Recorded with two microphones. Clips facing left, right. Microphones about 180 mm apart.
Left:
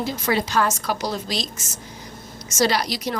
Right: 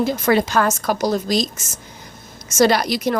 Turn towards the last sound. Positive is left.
turn(degrees=-55)  # may be behind; listen again after turning